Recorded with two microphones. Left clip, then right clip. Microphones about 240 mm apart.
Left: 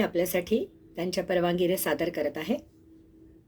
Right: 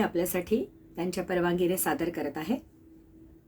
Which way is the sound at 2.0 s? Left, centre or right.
Right.